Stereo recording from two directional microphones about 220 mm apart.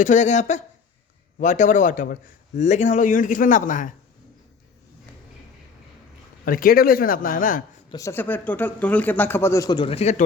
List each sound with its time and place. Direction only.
0.0 s a man's voice: 35° left (ahead or behind)
6.4 s a man's voice: 40° left (ahead or behind)
7.9 s speech: 15° left (ahead or behind); by 10.2 s 30° left (ahead or behind)